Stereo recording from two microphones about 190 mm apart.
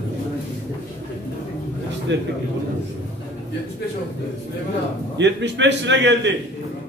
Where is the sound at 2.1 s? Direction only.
70° right (ahead or behind).